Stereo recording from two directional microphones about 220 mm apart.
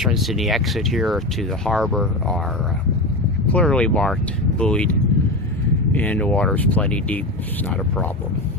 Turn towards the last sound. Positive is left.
turn(degrees=5)  # may be behind; listen again after turning